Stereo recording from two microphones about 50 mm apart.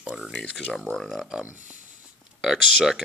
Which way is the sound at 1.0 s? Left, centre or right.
Centre.